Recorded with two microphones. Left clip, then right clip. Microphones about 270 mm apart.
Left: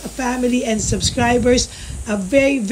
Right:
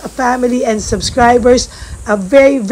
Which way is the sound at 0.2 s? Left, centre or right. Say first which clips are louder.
Right 7 dB; right.